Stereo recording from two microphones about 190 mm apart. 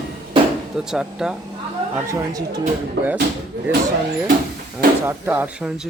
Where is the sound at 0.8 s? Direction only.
5° right (ahead or behind).